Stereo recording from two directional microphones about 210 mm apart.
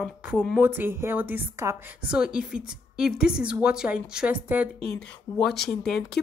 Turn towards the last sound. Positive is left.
turn(degrees=50)  # may be behind; listen again after turning